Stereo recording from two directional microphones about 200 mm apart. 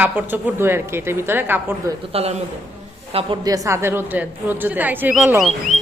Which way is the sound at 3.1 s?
30° right (ahead or behind).